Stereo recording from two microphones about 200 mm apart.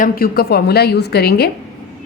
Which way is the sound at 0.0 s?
50° left (ahead or behind).